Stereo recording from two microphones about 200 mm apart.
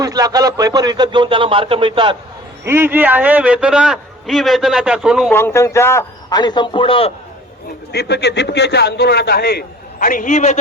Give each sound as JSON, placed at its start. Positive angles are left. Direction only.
{"t": 0.0, "sound": "speech", "side_deg": -20}
{"t": 2.6, "sound": "a man's voice", "side_deg": -10}
{"t": 5.3, "sound": "a man's voice", "side_deg": 10}
{"t": 7.9, "sound": "a man's voice", "side_deg": 55}